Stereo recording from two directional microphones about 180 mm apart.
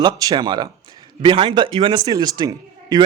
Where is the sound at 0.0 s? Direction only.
20° right (ahead or behind).